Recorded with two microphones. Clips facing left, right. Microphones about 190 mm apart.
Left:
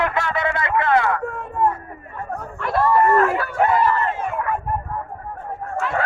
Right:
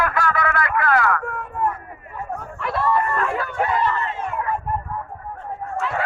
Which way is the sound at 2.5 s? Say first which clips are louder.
Left 4 dB; centre (ahead or behind).